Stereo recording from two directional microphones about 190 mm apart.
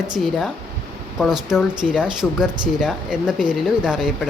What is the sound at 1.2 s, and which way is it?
Speech, centre (ahead or behind).